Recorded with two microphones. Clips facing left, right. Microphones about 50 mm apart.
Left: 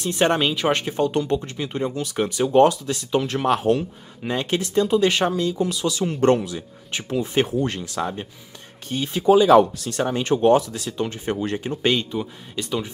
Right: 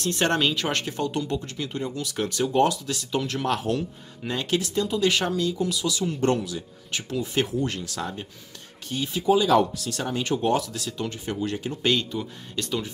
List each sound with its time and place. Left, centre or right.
0.0 s speech: centre
2.5 s speech: left
8.9 s speech: left
11.9 s speech: left